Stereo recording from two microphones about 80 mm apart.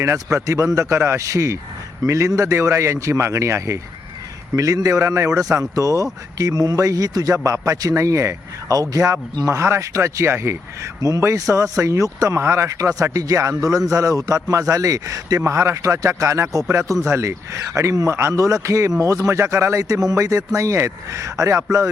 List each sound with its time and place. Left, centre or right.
0.0 s a man's voice: right
7.3 s a man's voice: right
11.0 s a man's voice: right